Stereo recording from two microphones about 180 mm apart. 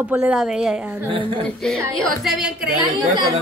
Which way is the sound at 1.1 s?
30° right (ahead or behind).